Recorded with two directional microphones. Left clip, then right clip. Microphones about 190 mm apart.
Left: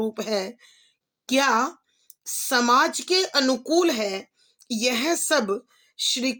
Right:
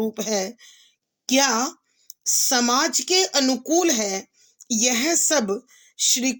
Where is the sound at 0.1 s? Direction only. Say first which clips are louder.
Right 1 dB; 30° right (ahead or behind).